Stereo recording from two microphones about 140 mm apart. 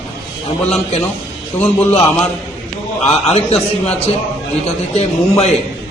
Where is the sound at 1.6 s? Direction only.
50° left (ahead or behind).